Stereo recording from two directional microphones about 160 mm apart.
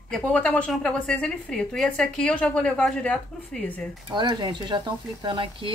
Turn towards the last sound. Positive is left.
turn(degrees=-30)  # may be behind; listen again after turning